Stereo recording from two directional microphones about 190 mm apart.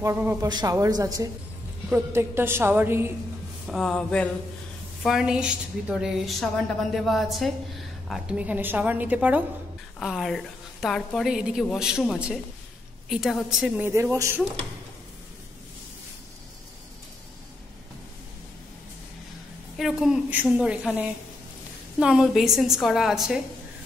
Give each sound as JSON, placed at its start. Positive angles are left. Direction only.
{"t": 0.0, "sound": "a woman's voice", "side_deg": -10}
{"t": 3.6, "sound": "a woman's voice", "side_deg": 0}
{"t": 19.8, "sound": "a woman's voice", "side_deg": -5}